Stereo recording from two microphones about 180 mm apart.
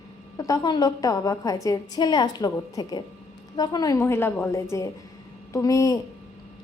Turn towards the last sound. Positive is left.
turn(degrees=20)  # may be behind; listen again after turning